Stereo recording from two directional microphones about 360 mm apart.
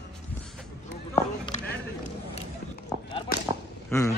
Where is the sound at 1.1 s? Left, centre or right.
Centre.